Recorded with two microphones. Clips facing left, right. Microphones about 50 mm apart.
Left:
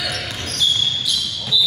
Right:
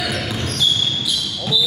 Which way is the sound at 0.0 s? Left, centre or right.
Centre.